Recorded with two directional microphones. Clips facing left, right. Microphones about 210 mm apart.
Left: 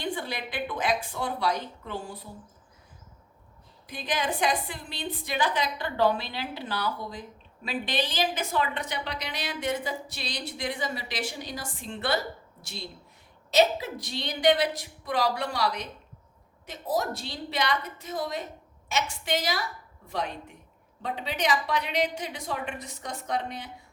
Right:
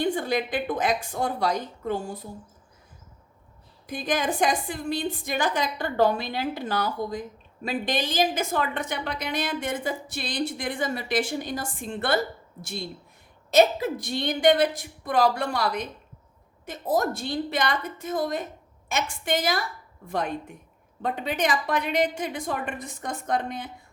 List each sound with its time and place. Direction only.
0.0 s a woman's voice: 45° right (ahead or behind)
3.8 s a woman's voice: 45° right (ahead or behind)
13.5 s a woman's voice: 50° right (ahead or behind)